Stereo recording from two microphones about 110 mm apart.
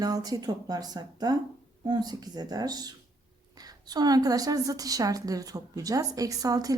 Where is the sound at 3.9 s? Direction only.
35° right (ahead or behind).